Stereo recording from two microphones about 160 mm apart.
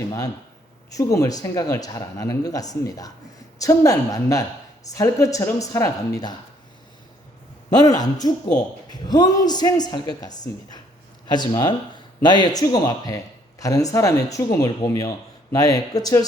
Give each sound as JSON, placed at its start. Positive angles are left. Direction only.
{"t": 0.9, "sound": "speech", "side_deg": 20}
{"t": 7.7, "sound": "speech", "side_deg": 25}